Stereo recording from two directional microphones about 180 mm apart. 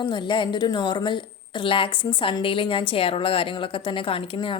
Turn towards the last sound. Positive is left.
turn(degrees=30)  # may be behind; listen again after turning